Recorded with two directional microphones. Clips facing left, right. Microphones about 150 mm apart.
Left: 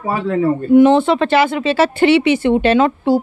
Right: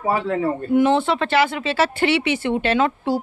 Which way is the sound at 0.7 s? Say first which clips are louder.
Left 7 dB; 20° left (ahead or behind).